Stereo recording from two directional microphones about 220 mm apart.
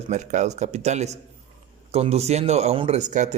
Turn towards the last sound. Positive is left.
turn(degrees=-35)  # may be behind; listen again after turning